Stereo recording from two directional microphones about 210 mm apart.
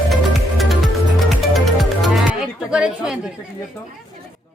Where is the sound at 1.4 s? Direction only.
Centre (ahead or behind).